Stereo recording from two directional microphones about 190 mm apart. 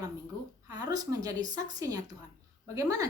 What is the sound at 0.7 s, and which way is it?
A woman's voice, 20° right (ahead or behind).